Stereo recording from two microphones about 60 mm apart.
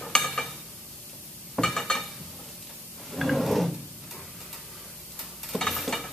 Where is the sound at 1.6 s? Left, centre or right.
Centre.